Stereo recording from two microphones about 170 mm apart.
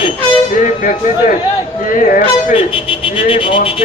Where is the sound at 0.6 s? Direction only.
50° left (ahead or behind).